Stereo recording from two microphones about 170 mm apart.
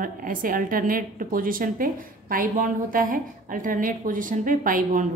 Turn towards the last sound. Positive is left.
turn(degrees=-50)  # may be behind; listen again after turning